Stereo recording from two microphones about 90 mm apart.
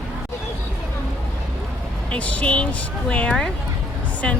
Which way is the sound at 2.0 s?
15° left (ahead or behind).